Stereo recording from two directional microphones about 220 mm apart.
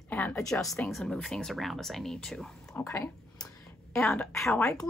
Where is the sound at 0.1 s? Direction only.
10° left (ahead or behind).